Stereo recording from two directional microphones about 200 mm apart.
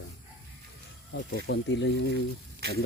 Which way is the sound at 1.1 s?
60° left (ahead or behind).